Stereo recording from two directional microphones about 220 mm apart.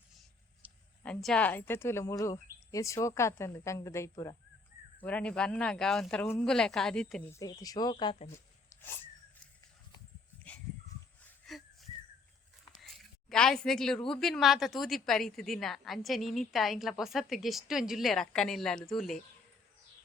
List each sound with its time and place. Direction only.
1.0 s a woman's voice: 5° left (ahead or behind)
7.4 s speech: 15° left (ahead or behind)
8.7 s sneeze: 10° left (ahead or behind)
11.4 s wheeze: centre (ahead or behind)
12.7 s a sound: centre (ahead or behind)
14.1 s a woman's voice: centre (ahead or behind)